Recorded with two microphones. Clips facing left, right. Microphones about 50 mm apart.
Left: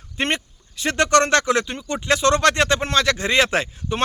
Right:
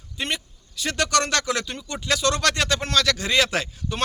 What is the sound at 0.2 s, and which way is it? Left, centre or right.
Speech, left.